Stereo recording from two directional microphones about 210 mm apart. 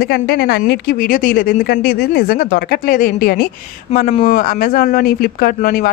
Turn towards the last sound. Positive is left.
turn(degrees=45)  # may be behind; listen again after turning